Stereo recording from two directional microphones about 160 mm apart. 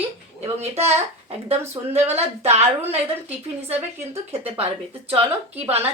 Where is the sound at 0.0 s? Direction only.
40° right (ahead or behind).